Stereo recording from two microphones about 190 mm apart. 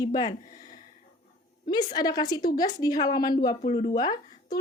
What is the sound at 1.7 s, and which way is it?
A woman's voice, 20° left (ahead or behind).